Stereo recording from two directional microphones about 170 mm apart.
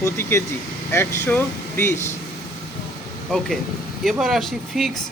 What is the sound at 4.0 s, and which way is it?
Speech, centre (ahead or behind).